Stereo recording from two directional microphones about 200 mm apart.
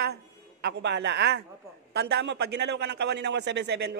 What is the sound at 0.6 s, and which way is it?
A man's voice, 60° right (ahead or behind).